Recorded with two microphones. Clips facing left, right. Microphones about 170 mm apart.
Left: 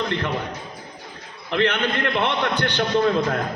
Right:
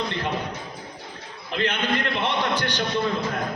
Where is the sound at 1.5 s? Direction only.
65° left (ahead or behind).